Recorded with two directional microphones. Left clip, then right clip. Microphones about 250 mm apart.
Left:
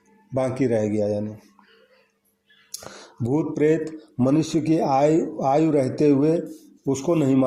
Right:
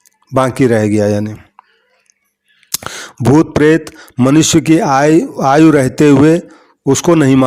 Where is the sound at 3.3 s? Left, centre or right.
Right.